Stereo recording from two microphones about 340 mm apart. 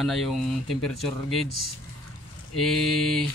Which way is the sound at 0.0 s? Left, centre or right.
Centre.